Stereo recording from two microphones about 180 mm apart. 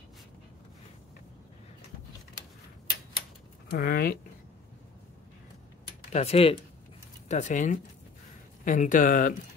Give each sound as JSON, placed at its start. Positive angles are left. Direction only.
{"t": 3.7, "sound": "speech", "side_deg": 60}
{"t": 6.1, "sound": "speech", "side_deg": 35}